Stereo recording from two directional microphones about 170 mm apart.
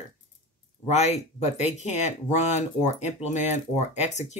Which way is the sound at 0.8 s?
40° left (ahead or behind).